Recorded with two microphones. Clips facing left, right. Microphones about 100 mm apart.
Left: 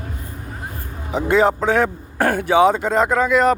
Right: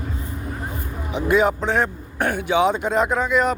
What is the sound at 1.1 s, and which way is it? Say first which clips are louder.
A man's voice: left 2 dB; 35° left (ahead or behind).